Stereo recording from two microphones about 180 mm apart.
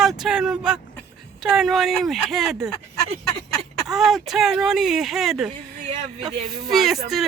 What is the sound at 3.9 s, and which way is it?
Speech, centre (ahead or behind).